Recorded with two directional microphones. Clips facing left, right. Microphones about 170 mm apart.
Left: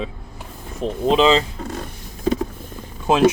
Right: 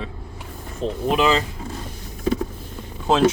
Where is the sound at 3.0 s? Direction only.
15° left (ahead or behind).